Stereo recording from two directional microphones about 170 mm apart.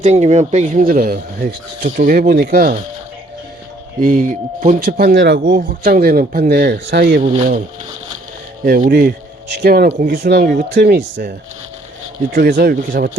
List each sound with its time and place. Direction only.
0.0 s speech: 40° right (ahead or behind); by 2.7 s 65° right (ahead or behind)
4.0 s speech: 50° right (ahead or behind); by 7.2 s 70° right (ahead or behind)
8.6 s speech: 65° right (ahead or behind)